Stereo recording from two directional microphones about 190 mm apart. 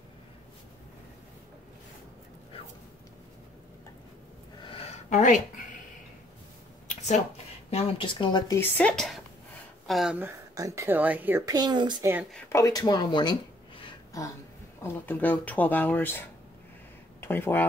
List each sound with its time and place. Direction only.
4.6 s a sound: 30° left (ahead or behind)
7.7 s speech: 25° left (ahead or behind)
8.5 s a woman's voice: 5° left (ahead or behind); by 12.1 s 25° right (ahead or behind)
12.5 s speech: 20° left (ahead or behind)
13.8 s a sound: 15° left (ahead or behind)
14.8 s speech: 10° left (ahead or behind)